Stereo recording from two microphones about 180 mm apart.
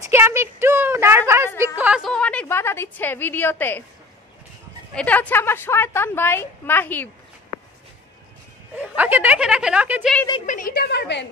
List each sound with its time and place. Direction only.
0.0 s a woman's voice: 15° right (ahead or behind)
1.6 s a sound: 10° right (ahead or behind); by 3.8 s 10° left (ahead or behind)
4.9 s a woman's voice: 5° left (ahead or behind)
8.7 s a woman's voice: 10° right (ahead or behind)
10.4 s a woman's voice: 45° left (ahead or behind); by 11.2 s 70° left (ahead or behind)